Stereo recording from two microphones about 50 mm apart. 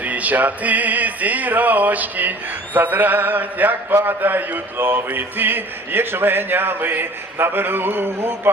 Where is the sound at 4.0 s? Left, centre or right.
Right.